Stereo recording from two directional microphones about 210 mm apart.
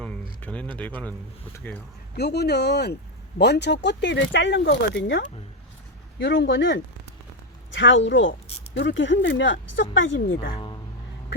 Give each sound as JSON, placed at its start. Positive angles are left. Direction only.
{"t": 0.0, "sound": "a sound", "side_deg": 5}
{"t": 0.8, "sound": "a man's voice", "side_deg": 5}
{"t": 2.1, "sound": "speech", "side_deg": 50}
{"t": 10.5, "sound": "speech", "side_deg": 20}